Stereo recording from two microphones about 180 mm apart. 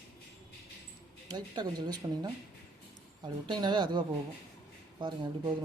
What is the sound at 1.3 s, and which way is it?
Speech, 25° right (ahead or behind).